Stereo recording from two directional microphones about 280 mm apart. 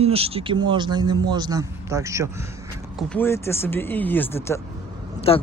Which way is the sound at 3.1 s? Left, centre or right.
Centre.